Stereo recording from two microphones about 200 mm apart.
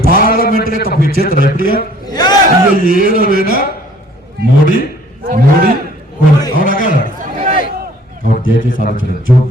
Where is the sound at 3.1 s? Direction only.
45° left (ahead or behind).